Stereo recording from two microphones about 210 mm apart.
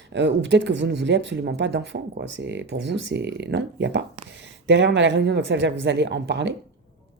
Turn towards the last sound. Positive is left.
turn(degrees=-55)  # may be behind; listen again after turning